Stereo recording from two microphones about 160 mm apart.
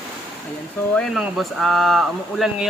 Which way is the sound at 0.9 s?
Centre (ahead or behind).